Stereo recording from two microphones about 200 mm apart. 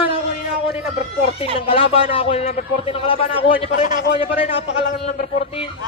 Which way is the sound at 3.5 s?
45° left (ahead or behind).